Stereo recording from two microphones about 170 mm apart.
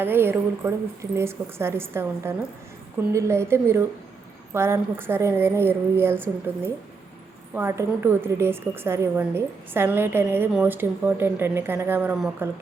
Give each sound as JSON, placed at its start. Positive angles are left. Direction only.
{"t": 0.0, "sound": "a woman's voice", "side_deg": -10}
{"t": 7.5, "sound": "a woman's voice", "side_deg": -15}